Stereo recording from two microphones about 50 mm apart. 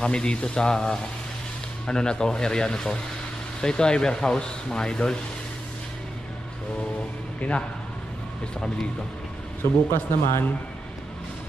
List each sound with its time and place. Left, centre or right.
0.0 s speech: centre
7.3 s a man's voice: left
9.6 s speech: left